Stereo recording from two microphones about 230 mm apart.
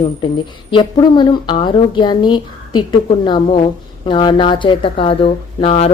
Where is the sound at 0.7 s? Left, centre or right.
Left.